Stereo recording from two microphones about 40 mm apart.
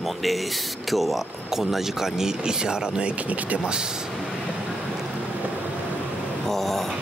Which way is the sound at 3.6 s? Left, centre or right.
Centre.